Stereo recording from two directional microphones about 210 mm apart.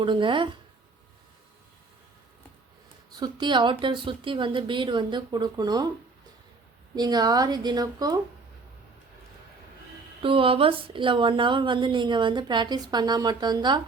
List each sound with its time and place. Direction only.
0.0 s a woman's voice: 25° right (ahead or behind)
3.1 s a woman's voice: 20° right (ahead or behind)
6.9 s a woman's voice: 20° right (ahead or behind)
10.2 s a woman's voice: 25° right (ahead or behind)